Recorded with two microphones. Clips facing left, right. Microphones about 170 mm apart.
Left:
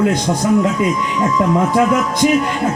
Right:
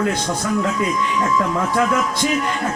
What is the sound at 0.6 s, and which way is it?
Speech, 20° left (ahead or behind).